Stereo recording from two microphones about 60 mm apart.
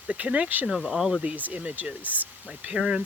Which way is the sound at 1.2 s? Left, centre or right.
Right.